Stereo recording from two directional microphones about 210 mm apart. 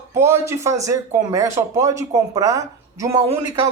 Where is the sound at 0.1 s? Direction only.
10° right (ahead or behind).